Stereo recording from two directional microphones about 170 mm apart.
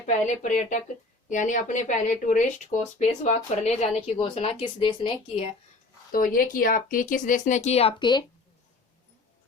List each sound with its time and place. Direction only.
0.0 s speech: 45° left (ahead or behind)
6.1 s speech: 55° left (ahead or behind); by 8.2 s 25° left (ahead or behind)